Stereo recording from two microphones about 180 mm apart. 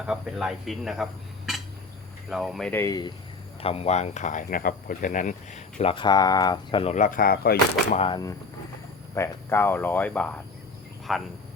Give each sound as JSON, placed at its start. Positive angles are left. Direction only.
{"t": 0.0, "sound": "speech", "side_deg": 0}
{"t": 2.3, "sound": "speech", "side_deg": 0}
{"t": 3.6, "sound": "speech", "side_deg": 35}
{"t": 6.9, "sound": "speech", "side_deg": 50}
{"t": 7.9, "sound": "speech", "side_deg": 30}
{"t": 9.1, "sound": "speech", "side_deg": 15}